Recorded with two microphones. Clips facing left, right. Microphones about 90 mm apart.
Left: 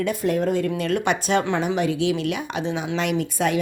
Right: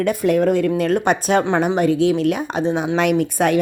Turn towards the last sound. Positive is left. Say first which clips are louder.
# right 6 dB
turn(degrees=-55)  # may be behind; listen again after turning